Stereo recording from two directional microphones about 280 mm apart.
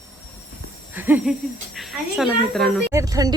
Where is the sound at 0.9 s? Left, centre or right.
Centre.